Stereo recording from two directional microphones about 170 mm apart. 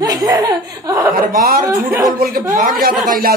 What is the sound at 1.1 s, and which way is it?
Speech, 60° right (ahead or behind).